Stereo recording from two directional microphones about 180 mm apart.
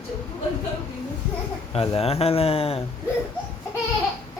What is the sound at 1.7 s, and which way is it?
Speech, 35° left (ahead or behind).